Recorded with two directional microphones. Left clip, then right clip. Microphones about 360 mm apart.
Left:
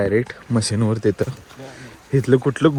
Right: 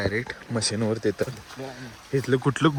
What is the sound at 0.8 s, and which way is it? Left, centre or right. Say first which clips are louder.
Speech: left 6 dB; left.